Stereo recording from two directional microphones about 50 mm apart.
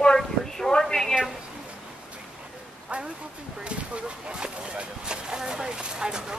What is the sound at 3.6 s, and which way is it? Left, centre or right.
Speech, right.